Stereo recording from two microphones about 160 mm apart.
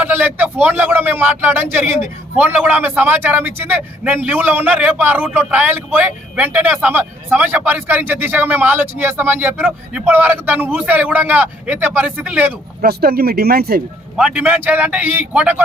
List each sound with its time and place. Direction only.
0.0 s a man's voice: 10° right (ahead or behind)
12.8 s speech: 70° right (ahead or behind)
14.2 s a man's voice: 5° right (ahead or behind)